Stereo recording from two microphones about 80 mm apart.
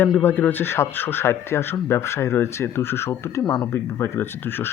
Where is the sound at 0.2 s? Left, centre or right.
Left.